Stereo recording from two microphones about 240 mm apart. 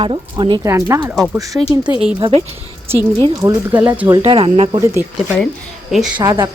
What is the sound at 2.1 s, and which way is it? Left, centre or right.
A woman's voice, right.